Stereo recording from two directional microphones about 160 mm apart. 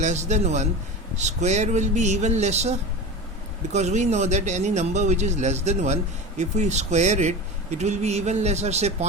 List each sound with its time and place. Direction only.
0.0 s speech: 45° right (ahead or behind)